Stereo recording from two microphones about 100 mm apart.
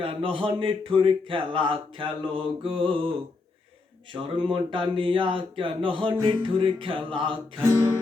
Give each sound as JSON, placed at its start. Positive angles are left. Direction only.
{"t": 0.0, "sound": "speech", "side_deg": -65}
{"t": 4.1, "sound": "speech", "side_deg": -55}
{"t": 7.6, "sound": "guitar", "side_deg": -30}